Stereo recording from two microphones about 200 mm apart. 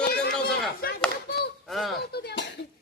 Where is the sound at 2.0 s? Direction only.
55° left (ahead or behind).